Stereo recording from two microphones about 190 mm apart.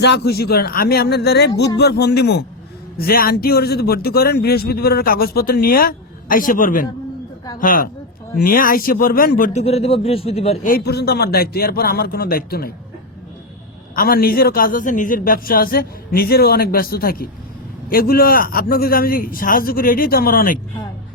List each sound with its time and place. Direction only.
0.0 s a man's voice: 60° left (ahead or behind); by 10.7 s 30° left (ahead or behind)
10.7 s a man's voice: 55° left (ahead or behind)
13.9 s a man's voice: 50° left (ahead or behind)